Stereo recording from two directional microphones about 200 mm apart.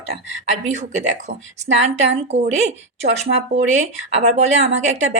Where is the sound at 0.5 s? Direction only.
35° right (ahead or behind).